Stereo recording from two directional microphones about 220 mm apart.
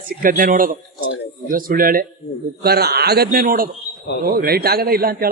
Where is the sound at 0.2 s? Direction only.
40° right (ahead or behind).